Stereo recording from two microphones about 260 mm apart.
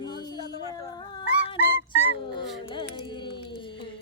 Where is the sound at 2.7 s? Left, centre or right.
Centre.